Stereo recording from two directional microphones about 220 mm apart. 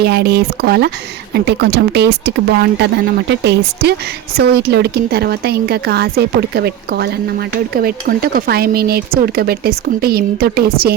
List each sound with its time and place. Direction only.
0.0 s speech: 45° right (ahead or behind)